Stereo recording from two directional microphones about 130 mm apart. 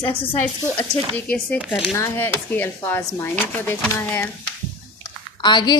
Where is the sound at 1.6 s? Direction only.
5° right (ahead or behind).